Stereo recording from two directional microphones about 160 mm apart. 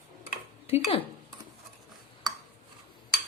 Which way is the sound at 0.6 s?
40° left (ahead or behind).